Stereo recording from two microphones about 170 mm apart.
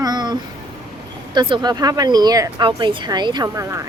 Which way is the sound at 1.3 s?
30° right (ahead or behind).